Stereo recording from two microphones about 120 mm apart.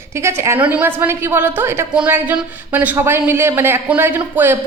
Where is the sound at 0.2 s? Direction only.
25° right (ahead or behind).